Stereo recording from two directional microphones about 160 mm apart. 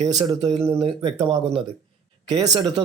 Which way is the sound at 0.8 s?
40° right (ahead or behind).